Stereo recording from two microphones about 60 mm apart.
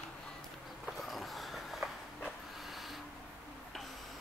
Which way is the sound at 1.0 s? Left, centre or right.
Centre.